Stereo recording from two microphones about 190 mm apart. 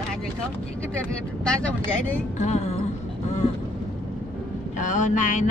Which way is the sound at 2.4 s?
35° left (ahead or behind).